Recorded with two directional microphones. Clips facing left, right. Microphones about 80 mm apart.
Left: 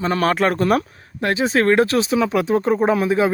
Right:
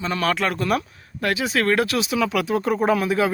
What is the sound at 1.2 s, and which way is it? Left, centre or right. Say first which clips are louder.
Speech: left 4 dB; left.